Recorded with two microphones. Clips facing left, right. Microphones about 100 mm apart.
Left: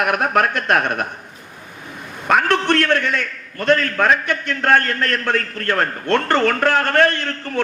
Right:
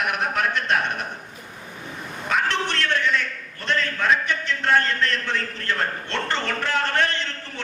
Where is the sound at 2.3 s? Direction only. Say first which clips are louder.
Left 8 dB; 50° left (ahead or behind).